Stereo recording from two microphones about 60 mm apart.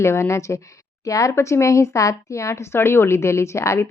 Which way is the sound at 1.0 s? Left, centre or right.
Left.